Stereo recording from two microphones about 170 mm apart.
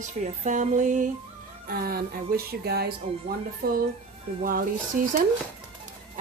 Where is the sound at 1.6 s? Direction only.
60° right (ahead or behind).